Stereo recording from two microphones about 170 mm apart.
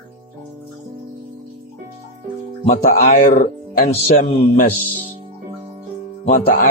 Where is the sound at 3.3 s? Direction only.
55° left (ahead or behind).